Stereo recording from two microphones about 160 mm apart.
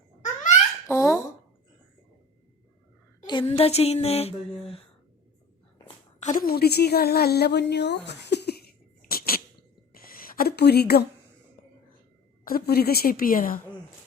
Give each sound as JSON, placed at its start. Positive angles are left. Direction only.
{"t": 0.9, "sound": "fowl", "side_deg": 15}
{"t": 3.2, "sound": "speech", "side_deg": 35}
{"t": 6.1, "sound": "a sound", "side_deg": 45}
{"t": 6.4, "sound": "speech", "side_deg": 75}
{"t": 9.9, "sound": "a sound", "side_deg": 65}
{"t": 12.5, "sound": "a woman's voice", "side_deg": 75}